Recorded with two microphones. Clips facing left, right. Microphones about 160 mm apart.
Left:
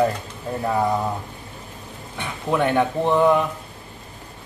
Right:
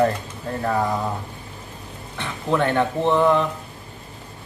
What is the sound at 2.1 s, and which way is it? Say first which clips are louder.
Speech: even; 15° left (ahead or behind).